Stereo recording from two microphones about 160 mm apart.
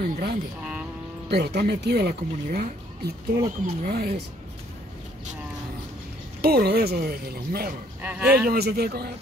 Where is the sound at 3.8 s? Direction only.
75° right (ahead or behind).